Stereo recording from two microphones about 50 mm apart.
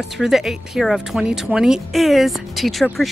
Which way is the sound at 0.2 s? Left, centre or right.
Centre.